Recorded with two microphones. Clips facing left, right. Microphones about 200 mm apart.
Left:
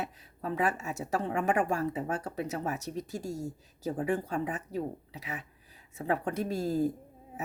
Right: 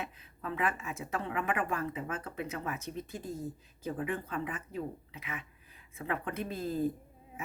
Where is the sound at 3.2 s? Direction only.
85° left.